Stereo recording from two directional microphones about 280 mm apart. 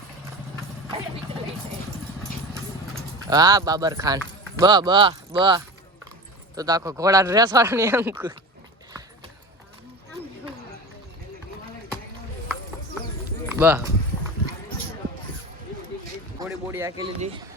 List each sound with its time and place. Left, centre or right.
3.2 s speech: centre
13.6 s speech: centre
16.4 s speech: centre